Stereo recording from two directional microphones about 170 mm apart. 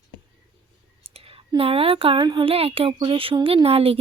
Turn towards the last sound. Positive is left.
turn(degrees=-35)  # may be behind; listen again after turning